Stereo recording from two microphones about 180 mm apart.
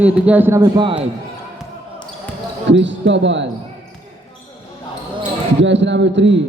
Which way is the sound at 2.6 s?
85° right.